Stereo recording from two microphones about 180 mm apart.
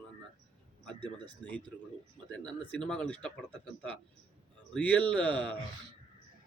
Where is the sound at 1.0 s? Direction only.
25° right (ahead or behind).